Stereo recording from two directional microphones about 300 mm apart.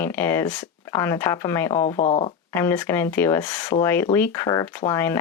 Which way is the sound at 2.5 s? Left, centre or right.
Centre.